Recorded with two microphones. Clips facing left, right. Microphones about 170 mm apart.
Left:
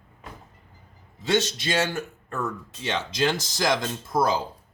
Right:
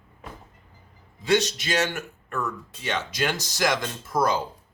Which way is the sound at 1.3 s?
30° left (ahead or behind).